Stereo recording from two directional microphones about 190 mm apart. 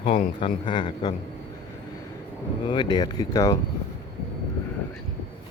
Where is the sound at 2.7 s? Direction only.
25° left (ahead or behind).